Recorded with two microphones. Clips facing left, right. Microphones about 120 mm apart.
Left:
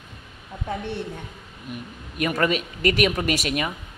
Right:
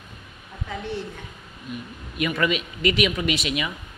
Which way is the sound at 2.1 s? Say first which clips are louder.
Left 1 dB; 40° left (ahead or behind).